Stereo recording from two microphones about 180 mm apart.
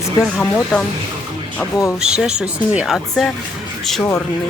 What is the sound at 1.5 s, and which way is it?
Speech, 15° left (ahead or behind).